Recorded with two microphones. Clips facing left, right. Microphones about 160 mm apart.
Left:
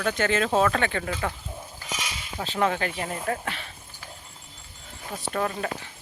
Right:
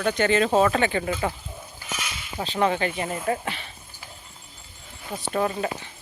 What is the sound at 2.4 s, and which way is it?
Speech, centre (ahead or behind).